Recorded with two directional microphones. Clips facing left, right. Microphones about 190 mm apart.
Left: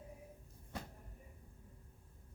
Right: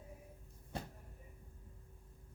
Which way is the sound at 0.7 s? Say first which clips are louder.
Right 2 dB; 30° right (ahead or behind).